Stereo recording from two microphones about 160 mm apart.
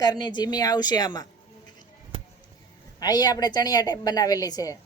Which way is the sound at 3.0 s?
25° left (ahead or behind).